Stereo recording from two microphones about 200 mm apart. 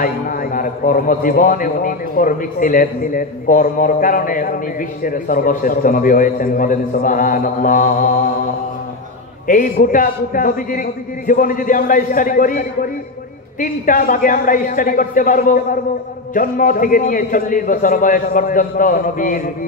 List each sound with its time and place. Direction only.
0.0 s a man's voice: 45° left (ahead or behind)
9.5 s a man's voice: 45° left (ahead or behind)